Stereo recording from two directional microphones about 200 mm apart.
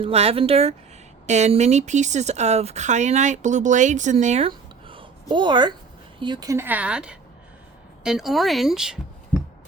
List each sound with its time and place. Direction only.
0.0 s speech: 30° right (ahead or behind); by 9.4 s 5° right (ahead or behind)